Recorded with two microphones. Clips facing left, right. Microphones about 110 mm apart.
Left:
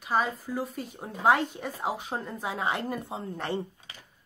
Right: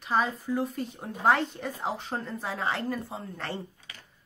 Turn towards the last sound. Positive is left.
turn(degrees=20)  # may be behind; listen again after turning